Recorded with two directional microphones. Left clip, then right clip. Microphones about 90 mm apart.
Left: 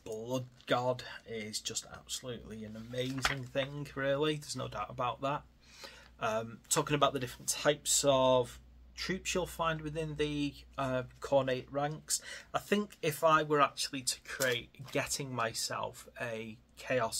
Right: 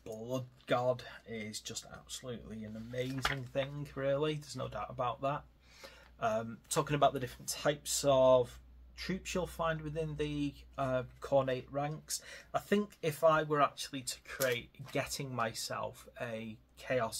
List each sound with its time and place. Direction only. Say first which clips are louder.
0.0 s speech: left 2 dB; 20° left (ahead or behind)